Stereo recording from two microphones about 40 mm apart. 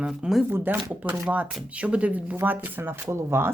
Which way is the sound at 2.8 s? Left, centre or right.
Right.